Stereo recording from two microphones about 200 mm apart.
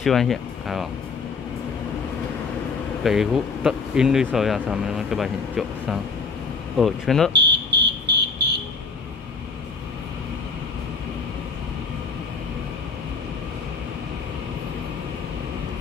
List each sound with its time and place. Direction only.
0.0 s speech: centre (ahead or behind)
3.0 s speech: centre (ahead or behind)
7.3 s a sound: 60° right (ahead or behind)